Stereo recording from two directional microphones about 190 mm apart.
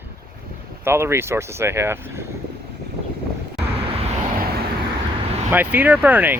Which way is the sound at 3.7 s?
30° right (ahead or behind).